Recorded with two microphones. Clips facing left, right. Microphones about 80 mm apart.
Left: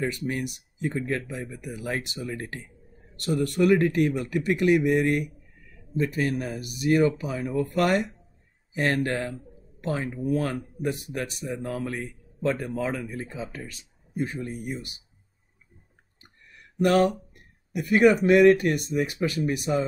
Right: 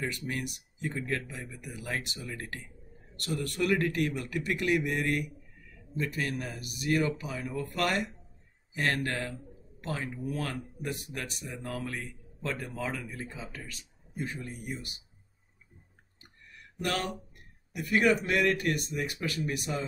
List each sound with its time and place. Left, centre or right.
0.0 s a man's voice: left
16.8 s a man's voice: left